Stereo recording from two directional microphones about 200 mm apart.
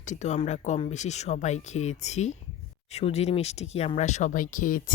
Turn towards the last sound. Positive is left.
turn(degrees=40)  # may be behind; listen again after turning